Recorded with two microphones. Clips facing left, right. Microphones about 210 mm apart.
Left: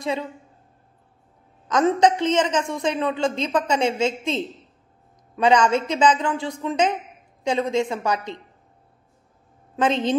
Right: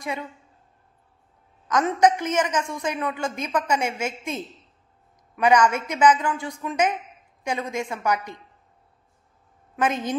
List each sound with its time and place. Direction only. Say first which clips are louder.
0.0 s a woman's voice: left 5 dB; 20° left (ahead or behind)
1.7 s a woman's voice: left 2 dB; 25° left (ahead or behind)
9.8 s a woman's voice: left 4 dB; 25° left (ahead or behind)